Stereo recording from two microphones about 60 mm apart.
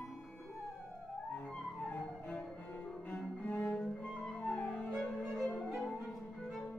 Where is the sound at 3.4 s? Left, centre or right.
Left.